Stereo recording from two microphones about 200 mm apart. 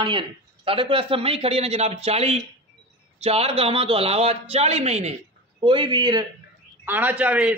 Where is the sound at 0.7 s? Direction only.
25° right (ahead or behind).